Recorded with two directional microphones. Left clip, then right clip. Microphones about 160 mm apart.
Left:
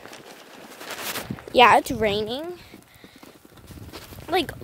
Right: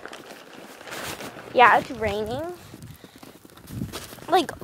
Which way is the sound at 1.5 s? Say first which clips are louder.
Left 1 dB; 90° left.